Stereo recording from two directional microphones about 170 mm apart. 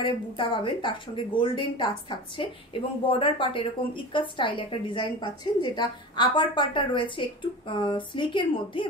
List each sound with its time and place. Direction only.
0.0 s a woman's voice: 30° left (ahead or behind)